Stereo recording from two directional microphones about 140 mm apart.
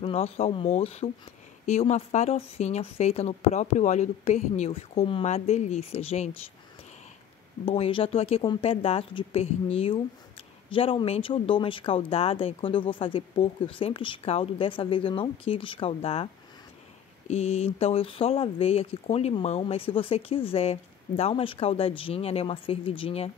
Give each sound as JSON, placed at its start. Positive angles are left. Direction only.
{"t": 0.0, "sound": "speech", "side_deg": 45}
{"t": 5.2, "sound": "speech", "side_deg": 55}
{"t": 7.6, "sound": "speech", "side_deg": 45}
{"t": 17.3, "sound": "speech", "side_deg": 50}